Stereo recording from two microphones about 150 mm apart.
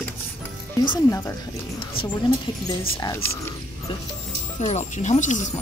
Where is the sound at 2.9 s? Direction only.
20° left (ahead or behind).